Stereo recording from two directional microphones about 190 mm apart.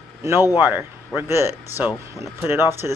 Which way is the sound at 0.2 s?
15° right (ahead or behind).